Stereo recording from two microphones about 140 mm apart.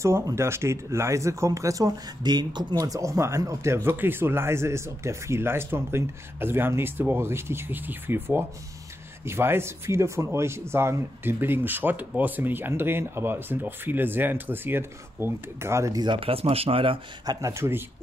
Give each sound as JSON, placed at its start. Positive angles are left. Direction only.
{"t": 0.0, "sound": "speech", "side_deg": -20}
{"t": 17.4, "sound": "speech", "side_deg": -20}